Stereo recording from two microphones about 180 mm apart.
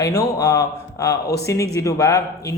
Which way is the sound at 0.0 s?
20° left (ahead or behind).